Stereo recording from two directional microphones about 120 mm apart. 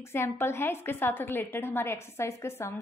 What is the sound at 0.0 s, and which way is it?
A woman's voice, 20° left (ahead or behind).